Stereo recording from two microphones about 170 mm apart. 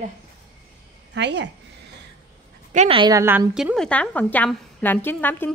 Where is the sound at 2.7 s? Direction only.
30° right (ahead or behind).